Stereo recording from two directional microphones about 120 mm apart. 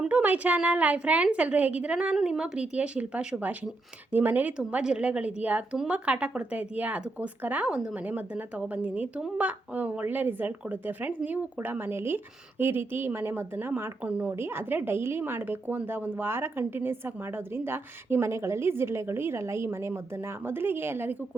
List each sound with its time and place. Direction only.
0.0 s speech: 15° right (ahead or behind)